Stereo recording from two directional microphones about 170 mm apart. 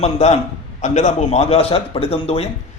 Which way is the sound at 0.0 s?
40° left (ahead or behind).